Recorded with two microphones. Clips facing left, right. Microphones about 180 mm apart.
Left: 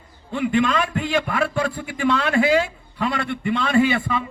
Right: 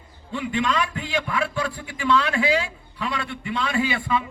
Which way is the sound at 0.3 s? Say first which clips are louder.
Left 4 dB; 55° left (ahead or behind).